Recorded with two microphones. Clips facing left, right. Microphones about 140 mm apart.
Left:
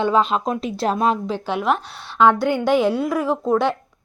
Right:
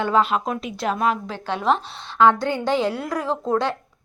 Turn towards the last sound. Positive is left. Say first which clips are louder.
# left 3 dB
turn(degrees=10)  # may be behind; listen again after turning